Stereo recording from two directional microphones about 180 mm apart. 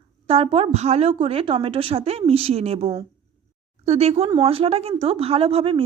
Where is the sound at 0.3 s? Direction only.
30° right (ahead or behind).